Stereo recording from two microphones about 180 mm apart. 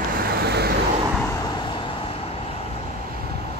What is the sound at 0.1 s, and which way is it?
Vehicle, 55° right (ahead or behind).